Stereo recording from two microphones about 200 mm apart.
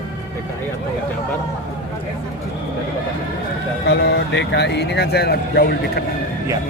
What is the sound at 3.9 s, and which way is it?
Speech, 60° left (ahead or behind).